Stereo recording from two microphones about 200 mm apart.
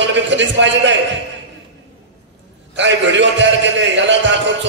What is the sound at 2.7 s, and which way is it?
A man's voice, 65° right (ahead or behind).